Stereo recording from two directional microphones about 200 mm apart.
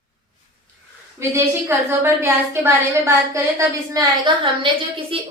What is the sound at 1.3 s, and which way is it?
A woman's voice, 10° right (ahead or behind).